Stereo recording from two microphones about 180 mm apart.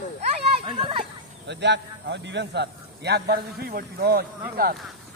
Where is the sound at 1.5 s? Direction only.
75° right (ahead or behind); by 4.7 s 55° right (ahead or behind).